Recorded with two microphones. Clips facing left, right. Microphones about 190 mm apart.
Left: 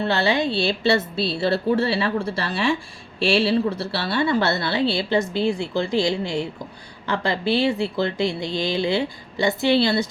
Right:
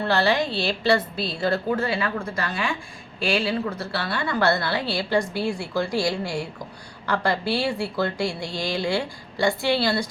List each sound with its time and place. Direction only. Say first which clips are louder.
0.0 s a woman's voice: left 1 dB; 25° left (ahead or behind)